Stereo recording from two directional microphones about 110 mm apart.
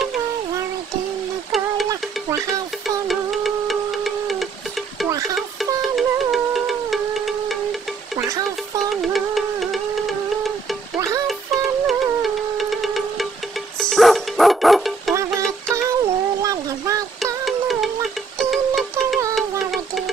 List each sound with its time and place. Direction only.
1.9 s a sound: 30° right (ahead or behind)
3.1 s music: centre (ahead or behind)
5.8 s music: centre (ahead or behind)
9.0 s music: centre (ahead or behind)
11.9 s music: centre (ahead or behind)
15.7 s child singing: 30° right (ahead or behind)
17.5 s music: centre (ahead or behind)
19.3 s a sound: centre (ahead or behind)